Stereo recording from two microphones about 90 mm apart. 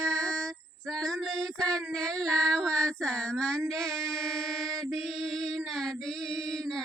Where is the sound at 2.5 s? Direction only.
5° left (ahead or behind).